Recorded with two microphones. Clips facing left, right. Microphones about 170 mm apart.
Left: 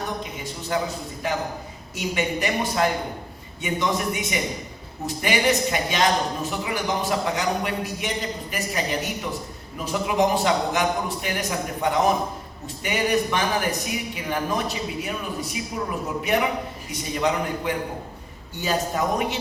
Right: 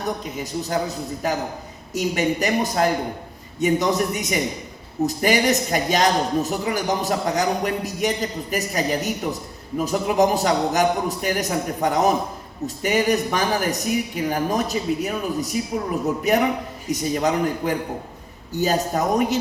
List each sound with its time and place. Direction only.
0.3 s a man's voice: 40° right (ahead or behind)